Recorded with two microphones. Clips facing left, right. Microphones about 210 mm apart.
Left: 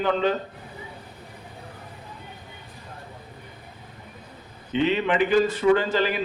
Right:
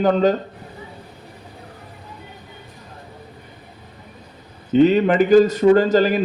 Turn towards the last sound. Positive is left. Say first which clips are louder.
# right 7 dB
turn(degrees=-40)  # may be behind; listen again after turning